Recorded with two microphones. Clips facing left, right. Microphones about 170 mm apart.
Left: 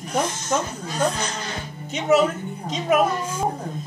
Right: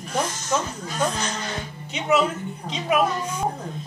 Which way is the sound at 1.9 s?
40° left (ahead or behind).